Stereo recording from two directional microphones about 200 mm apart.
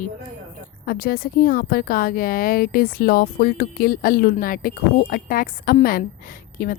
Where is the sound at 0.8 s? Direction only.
50° left (ahead or behind).